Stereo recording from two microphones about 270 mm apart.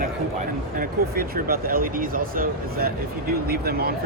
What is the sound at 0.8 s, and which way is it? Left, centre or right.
Speech, right.